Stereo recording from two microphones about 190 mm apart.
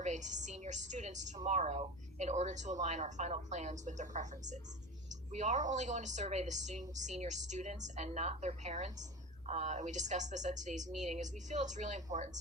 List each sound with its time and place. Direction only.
0.0 s a woman's voice: 40° right (ahead or behind)